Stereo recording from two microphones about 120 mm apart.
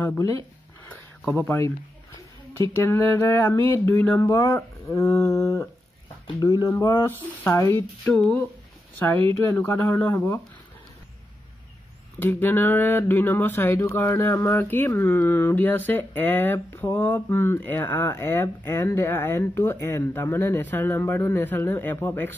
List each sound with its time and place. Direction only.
1.2 s speech: 15° left (ahead or behind)
2.8 s speech: 20° left (ahead or behind)
7.4 s speech: 20° left (ahead or behind)
12.2 s speech: 15° left (ahead or behind)